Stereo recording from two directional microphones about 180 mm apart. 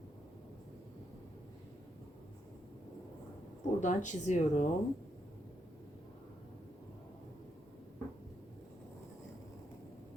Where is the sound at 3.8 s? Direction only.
45° left (ahead or behind).